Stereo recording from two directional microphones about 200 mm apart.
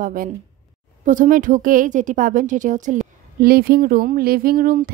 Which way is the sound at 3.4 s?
50° right (ahead or behind).